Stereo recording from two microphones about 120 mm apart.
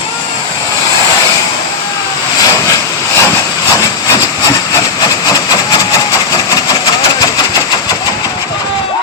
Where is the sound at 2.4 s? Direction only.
30° left (ahead or behind).